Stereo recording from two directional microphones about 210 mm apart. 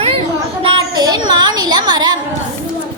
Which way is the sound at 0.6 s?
20° right (ahead or behind).